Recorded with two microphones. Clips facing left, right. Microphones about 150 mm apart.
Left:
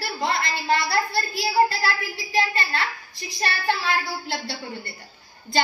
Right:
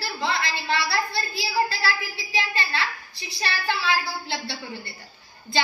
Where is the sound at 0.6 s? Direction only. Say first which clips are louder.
Left 5 dB; 45° left (ahead or behind).